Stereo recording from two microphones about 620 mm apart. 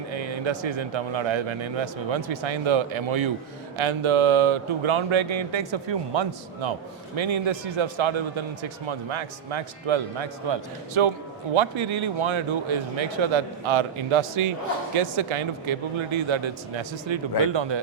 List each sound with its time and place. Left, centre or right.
0.1 s music: right
0.6 s speech: right